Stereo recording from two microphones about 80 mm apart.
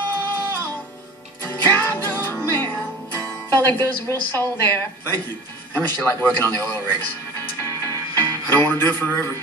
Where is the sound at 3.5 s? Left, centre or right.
Left.